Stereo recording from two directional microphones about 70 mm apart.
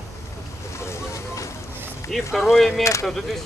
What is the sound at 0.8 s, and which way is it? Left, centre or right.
Boat, left.